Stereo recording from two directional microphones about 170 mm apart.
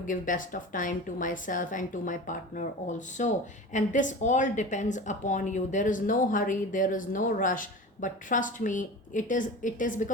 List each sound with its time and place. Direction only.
0.0 s speech: 50° left (ahead or behind)